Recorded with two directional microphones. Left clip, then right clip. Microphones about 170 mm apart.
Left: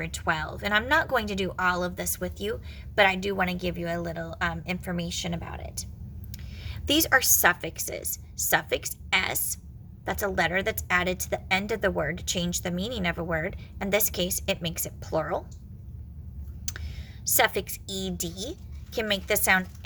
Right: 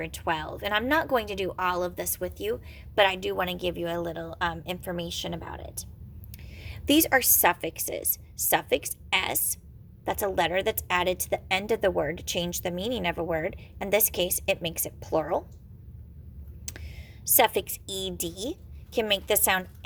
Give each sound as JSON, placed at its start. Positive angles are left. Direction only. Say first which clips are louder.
{"t": 0.0, "sound": "a woman's voice", "louder": "left 1 dB", "side_deg": -30}
{"t": 16.7, "sound": "a sound", "louder": "left 4 dB", "side_deg": -25}
{"t": 17.2, "sound": "speech", "louder": "right 1 dB", "side_deg": -25}